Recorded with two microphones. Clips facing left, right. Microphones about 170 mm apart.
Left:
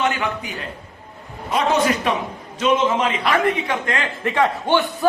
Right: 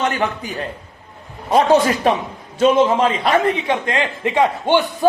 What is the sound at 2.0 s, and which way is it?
A man's voice, 35° right (ahead or behind).